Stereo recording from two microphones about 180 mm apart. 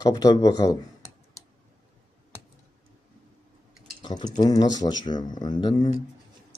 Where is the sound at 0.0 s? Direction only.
20° left (ahead or behind).